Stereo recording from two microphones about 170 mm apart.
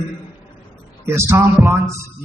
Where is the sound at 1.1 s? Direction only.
15° right (ahead or behind).